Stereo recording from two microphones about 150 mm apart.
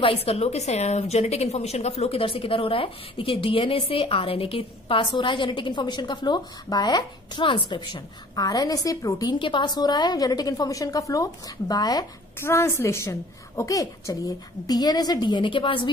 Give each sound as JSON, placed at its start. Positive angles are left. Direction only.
{"t": 0.0, "sound": "a woman's voice", "side_deg": 40}